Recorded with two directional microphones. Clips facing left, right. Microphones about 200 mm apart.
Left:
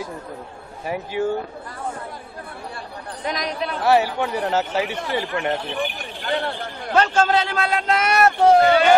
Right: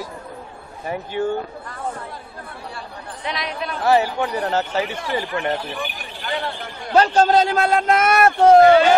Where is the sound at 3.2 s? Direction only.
40° left (ahead or behind).